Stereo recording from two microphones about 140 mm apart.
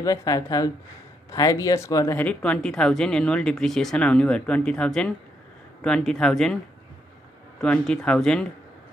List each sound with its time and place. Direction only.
0.0 s speech: 25° left (ahead or behind)
2.1 s speech: 10° left (ahead or behind)
7.6 s speech: 5° left (ahead or behind)